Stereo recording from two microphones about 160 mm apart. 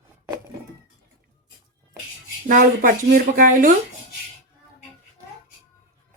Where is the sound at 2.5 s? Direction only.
65° right (ahead or behind).